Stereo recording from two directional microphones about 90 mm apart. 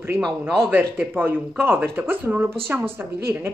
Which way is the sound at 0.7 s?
20° right (ahead or behind).